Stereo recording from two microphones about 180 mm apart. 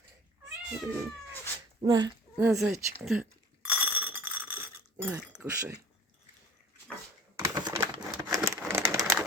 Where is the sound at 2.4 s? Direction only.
Centre (ahead or behind).